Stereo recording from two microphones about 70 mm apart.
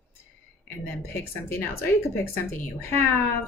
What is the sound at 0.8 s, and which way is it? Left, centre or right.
Speech, left.